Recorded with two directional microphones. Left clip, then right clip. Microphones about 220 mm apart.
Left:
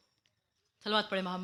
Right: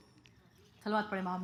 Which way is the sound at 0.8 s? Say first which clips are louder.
Left 3 dB; 15° left (ahead or behind).